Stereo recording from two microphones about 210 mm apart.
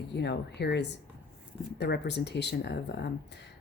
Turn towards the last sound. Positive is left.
turn(degrees=55)  # may be behind; listen again after turning